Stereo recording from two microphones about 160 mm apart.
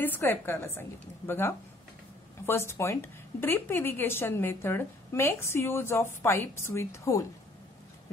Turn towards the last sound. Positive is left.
turn(degrees=20)  # may be behind; listen again after turning